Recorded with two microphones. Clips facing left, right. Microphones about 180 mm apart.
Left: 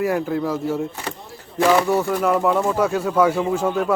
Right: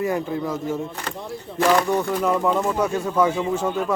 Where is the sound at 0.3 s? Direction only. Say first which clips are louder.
Left 3 dB; 10° left (ahead or behind).